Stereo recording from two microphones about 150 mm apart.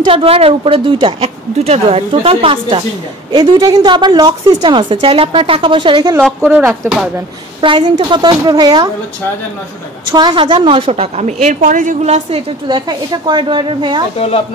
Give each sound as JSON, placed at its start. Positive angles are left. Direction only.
{"t": 0.0, "sound": "a woman's voice", "side_deg": -35}
{"t": 6.4, "sound": "speech", "side_deg": -15}
{"t": 7.6, "sound": "a woman's voice", "side_deg": -35}
{"t": 10.1, "sound": "a woman's voice", "side_deg": -30}